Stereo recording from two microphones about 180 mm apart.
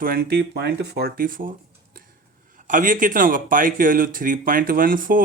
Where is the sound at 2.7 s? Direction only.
45° right (ahead or behind).